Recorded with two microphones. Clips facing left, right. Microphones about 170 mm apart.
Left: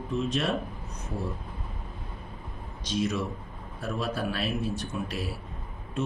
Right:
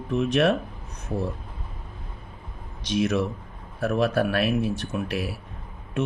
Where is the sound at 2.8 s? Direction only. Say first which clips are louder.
Right 5 dB; 65° right (ahead or behind).